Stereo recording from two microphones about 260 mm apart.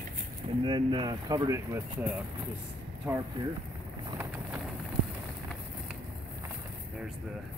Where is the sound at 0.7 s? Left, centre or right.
Centre.